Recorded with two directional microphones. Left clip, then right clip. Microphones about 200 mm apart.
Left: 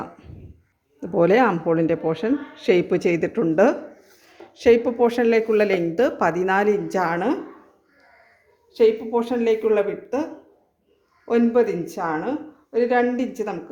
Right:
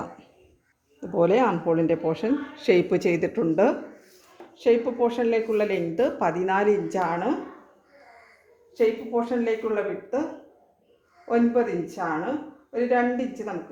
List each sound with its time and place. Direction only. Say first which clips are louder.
0.9 s speech: left 4 dB; 15° left (ahead or behind)
4.5 s speech: left 5 dB; 30° left (ahead or behind)
8.7 s speech: left 5 dB; 45° left (ahead or behind)
11.3 s speech: left 4 dB; 50° left (ahead or behind)